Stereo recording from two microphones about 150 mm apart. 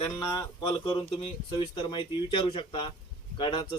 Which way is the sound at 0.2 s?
25° left (ahead or behind).